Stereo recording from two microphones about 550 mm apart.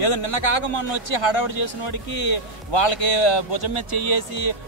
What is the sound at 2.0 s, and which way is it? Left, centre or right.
Speech, left.